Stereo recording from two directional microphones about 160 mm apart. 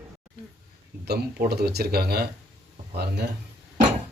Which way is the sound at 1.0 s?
85° right.